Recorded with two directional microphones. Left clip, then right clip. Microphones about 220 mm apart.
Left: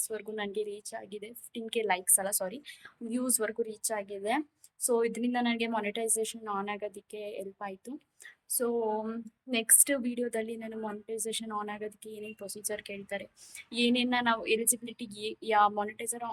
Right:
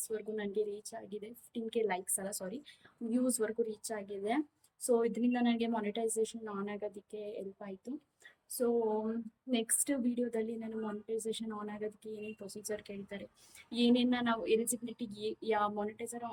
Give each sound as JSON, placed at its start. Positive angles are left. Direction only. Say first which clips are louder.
{"t": 0.0, "sound": "a woman's voice", "louder": "left 2 dB", "side_deg": -5}